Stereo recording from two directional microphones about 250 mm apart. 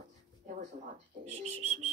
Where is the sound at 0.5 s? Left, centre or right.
Right.